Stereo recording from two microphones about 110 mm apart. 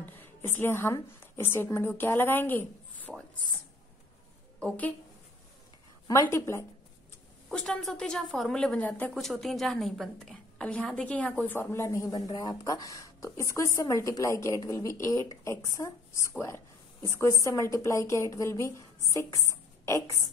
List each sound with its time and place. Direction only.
0.0 s a sound: 20° left (ahead or behind)
1.2 s a woman's voice: 20° left (ahead or behind)
3.1 s speech: centre (ahead or behind)
4.6 s a woman's voice: 15° left (ahead or behind)
6.0 s a woman's voice: 30° left (ahead or behind)
7.4 s a woman's voice: 10° left (ahead or behind)
9.1 s a woman's voice: centre (ahead or behind); by 20.2 s 25° left (ahead or behind)